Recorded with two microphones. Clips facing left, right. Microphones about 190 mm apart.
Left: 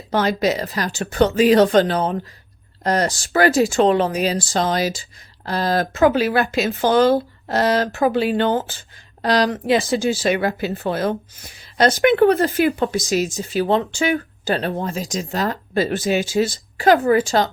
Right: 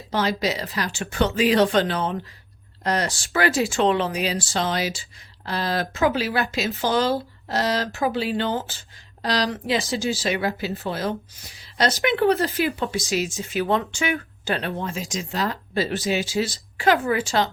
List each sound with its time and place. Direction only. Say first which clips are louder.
0.1 s speech: left 5 dB; 50° left (ahead or behind)